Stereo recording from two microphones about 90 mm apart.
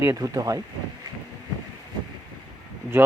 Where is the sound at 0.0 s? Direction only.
35° right (ahead or behind).